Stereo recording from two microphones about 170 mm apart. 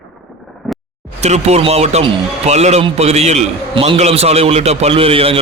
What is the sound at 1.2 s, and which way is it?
A man's voice, 40° right (ahead or behind).